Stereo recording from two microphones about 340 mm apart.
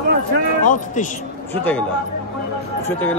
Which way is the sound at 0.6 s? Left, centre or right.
Left.